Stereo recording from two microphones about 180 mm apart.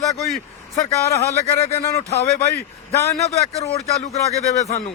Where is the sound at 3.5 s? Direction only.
35° left (ahead or behind).